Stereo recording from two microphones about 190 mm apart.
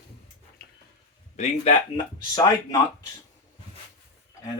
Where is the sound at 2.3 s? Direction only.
20° left (ahead or behind).